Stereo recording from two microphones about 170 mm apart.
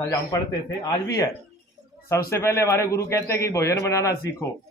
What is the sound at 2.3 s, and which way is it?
A man's voice, 15° left (ahead or behind).